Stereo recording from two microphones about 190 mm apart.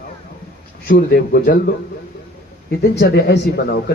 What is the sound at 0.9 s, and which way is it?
Speech, 55° left (ahead or behind).